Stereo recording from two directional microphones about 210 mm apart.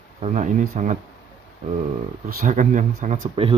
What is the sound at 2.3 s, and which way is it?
Speech, 40° right (ahead or behind).